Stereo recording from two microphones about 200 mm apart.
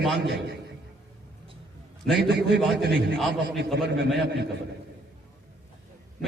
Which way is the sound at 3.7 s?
60° right (ahead or behind).